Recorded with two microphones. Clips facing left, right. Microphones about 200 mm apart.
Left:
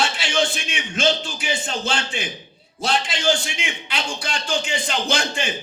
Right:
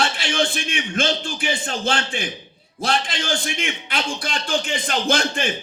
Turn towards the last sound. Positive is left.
turn(degrees=-55)  # may be behind; listen again after turning